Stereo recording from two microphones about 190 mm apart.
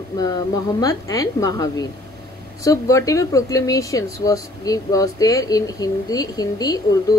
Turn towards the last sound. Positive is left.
turn(degrees=20)  # may be behind; listen again after turning